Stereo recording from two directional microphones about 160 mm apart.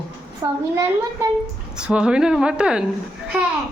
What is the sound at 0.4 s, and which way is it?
Speech, 20° right (ahead or behind).